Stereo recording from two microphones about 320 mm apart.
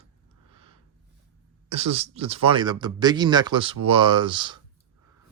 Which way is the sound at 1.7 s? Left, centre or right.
Centre.